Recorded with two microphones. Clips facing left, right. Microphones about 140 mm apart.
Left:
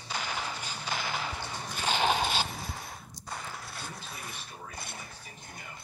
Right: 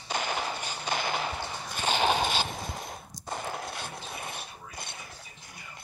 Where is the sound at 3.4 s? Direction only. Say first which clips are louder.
Right 6 dB; 60° right (ahead or behind).